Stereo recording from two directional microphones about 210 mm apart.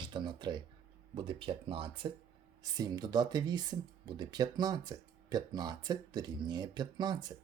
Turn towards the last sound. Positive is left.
turn(degrees=-20)  # may be behind; listen again after turning